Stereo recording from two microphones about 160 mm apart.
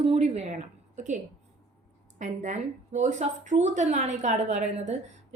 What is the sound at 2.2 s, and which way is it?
A woman's voice, 50° right (ahead or behind).